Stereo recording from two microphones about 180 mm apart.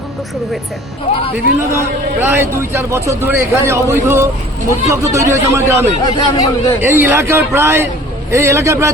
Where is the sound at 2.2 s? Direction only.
15° right (ahead or behind).